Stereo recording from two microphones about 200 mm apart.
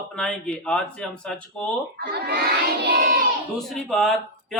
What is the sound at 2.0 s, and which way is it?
Speech, 55° right (ahead or behind).